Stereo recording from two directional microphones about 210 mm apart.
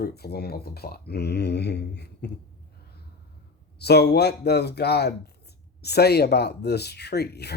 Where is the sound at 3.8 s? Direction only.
50° left (ahead or behind).